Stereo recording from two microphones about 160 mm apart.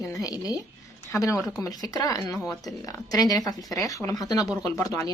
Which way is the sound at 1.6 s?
25° left (ahead or behind).